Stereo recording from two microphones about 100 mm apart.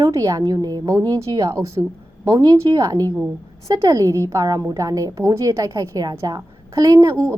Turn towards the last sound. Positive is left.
turn(degrees=-35)  # may be behind; listen again after turning